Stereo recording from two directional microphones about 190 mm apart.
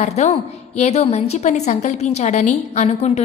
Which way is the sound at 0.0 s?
35° left (ahead or behind).